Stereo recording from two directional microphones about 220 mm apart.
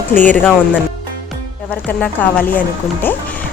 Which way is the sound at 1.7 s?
5° left (ahead or behind).